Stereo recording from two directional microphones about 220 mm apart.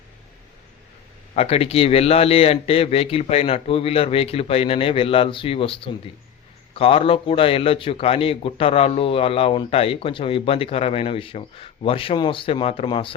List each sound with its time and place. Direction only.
1.4 s a man's voice: 25° left (ahead or behind)